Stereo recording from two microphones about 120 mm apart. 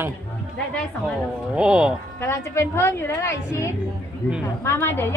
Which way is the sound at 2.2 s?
20° left (ahead or behind).